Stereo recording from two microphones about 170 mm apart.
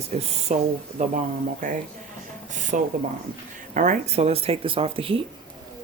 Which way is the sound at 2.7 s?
45° right (ahead or behind).